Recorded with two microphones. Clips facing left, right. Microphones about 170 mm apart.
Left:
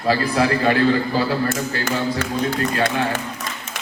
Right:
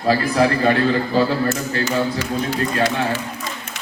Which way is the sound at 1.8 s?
55° left (ahead or behind).